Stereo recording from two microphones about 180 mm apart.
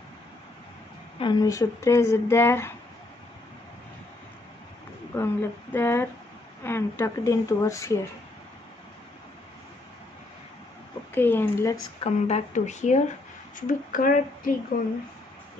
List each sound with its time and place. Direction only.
1.2 s speech: 20° left (ahead or behind)
5.1 s speech: 15° left (ahead or behind)
11.1 s speech: 10° left (ahead or behind)
12.0 s speech: 40° left (ahead or behind)